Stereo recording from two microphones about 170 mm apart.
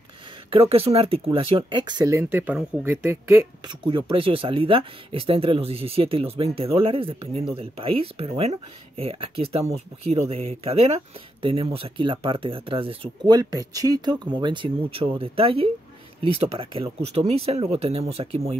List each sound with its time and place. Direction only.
0.5 s speech: 35° right (ahead or behind); by 3.4 s 15° right (ahead or behind)
3.6 s speech: 25° right (ahead or behind)